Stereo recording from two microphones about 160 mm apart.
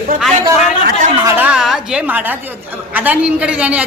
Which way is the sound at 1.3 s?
10° right (ahead or behind).